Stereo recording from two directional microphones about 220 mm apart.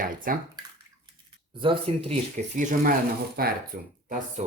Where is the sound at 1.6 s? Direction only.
25° right (ahead or behind); by 3.9 s 40° right (ahead or behind).